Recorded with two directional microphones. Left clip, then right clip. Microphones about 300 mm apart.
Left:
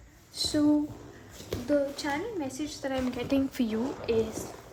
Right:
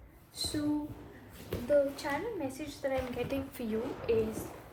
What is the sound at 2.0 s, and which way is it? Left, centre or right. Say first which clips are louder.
A woman's voice: left 3 dB; left.